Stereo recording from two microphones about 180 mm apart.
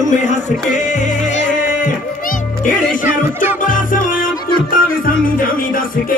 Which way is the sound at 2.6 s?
45° left (ahead or behind).